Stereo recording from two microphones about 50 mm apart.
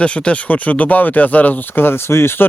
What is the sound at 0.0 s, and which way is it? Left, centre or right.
Speech, left.